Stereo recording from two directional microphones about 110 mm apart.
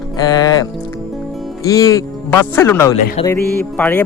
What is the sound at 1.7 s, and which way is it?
Music, 30° left (ahead or behind).